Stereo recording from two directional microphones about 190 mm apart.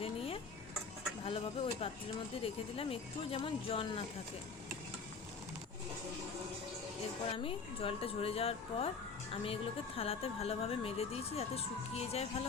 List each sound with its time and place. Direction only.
0.0 s dishes: 30° left (ahead or behind)
1.2 s a woman's voice: 30° left (ahead or behind)
7.3 s a woman's voice: 30° left (ahead or behind)